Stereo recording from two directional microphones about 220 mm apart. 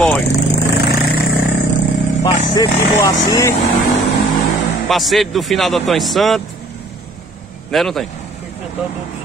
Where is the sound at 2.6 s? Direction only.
15° left (ahead or behind).